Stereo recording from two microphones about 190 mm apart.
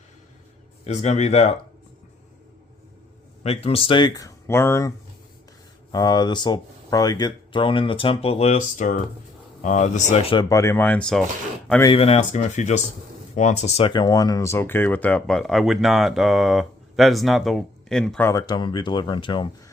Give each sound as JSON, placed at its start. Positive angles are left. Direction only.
{"t": 0.9, "sound": "speech", "side_deg": 35}
{"t": 3.4, "sound": "speech", "side_deg": 30}
{"t": 10.5, "sound": "speech", "side_deg": 15}
{"t": 11.9, "sound": "speech", "side_deg": 30}
{"t": 18.3, "sound": "speech", "side_deg": 20}